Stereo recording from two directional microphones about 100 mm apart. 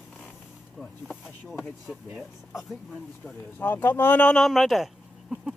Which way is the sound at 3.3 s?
20° left (ahead or behind).